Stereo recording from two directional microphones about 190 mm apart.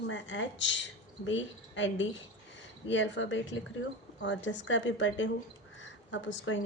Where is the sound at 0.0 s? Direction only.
75° left (ahead or behind).